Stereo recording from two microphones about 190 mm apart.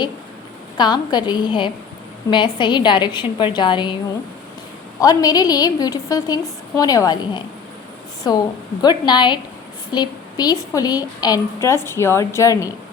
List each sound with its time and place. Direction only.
0.8 s a woman's voice: 20° left (ahead or behind)
4.9 s a woman's voice: 20° left (ahead or behind)